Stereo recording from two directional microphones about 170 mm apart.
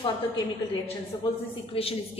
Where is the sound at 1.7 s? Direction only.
35° left (ahead or behind).